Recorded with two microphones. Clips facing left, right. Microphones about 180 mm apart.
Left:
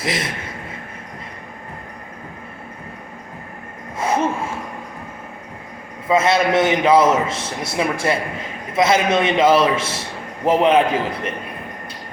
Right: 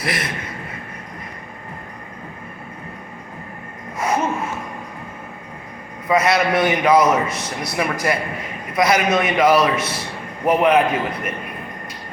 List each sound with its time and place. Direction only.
0.0 s a man's voice: 25° left (ahead or behind)
6.1 s a man's voice: 25° left (ahead or behind)